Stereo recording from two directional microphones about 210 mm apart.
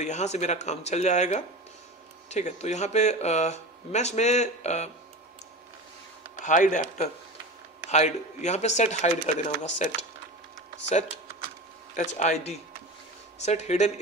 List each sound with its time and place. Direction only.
0.0 s speech: 35° left (ahead or behind)
6.4 s speech: 35° left (ahead or behind)
11.9 s speech: 35° left (ahead or behind)